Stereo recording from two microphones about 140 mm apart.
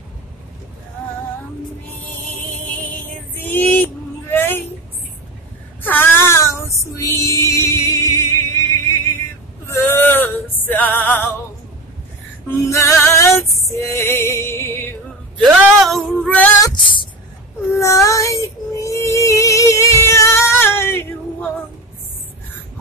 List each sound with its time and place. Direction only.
3.4 s vehicle: 15° left (ahead or behind)
5.8 s child singing: 15° left (ahead or behind)
9.7 s music: 15° left (ahead or behind)
12.4 s female singing: 20° left (ahead or behind)
15.6 s female singing: centre (ahead or behind)
16.6 s a sound: 35° left (ahead or behind)
17.7 s music: 20° left (ahead or behind)